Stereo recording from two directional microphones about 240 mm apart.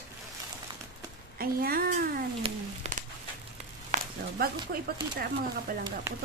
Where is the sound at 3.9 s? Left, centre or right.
Right.